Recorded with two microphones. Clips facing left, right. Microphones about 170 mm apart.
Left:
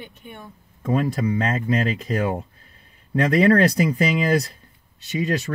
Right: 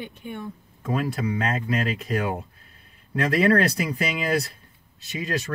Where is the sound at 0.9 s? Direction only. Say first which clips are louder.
Left 4 dB; 35° left (ahead or behind).